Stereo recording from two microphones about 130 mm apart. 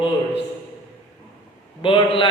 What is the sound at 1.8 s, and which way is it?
Speech, 40° left (ahead or behind).